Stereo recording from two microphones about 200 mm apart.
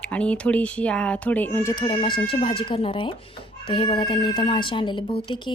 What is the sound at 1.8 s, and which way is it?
Speech, 25° left (ahead or behind).